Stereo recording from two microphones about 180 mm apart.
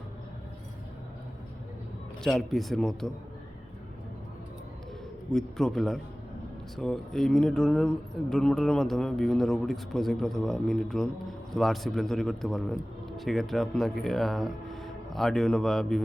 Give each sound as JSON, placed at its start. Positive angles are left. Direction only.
{"t": 2.2, "sound": "speech", "side_deg": 0}
{"t": 5.3, "sound": "speech", "side_deg": 5}